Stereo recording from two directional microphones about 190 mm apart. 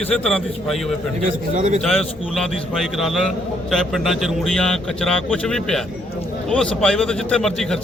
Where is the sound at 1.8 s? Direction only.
Centre (ahead or behind).